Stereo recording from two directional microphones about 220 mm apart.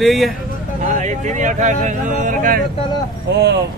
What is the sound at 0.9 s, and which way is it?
Speech, 35° right (ahead or behind).